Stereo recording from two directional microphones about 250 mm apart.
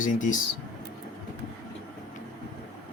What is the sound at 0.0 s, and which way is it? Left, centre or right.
Speech, left.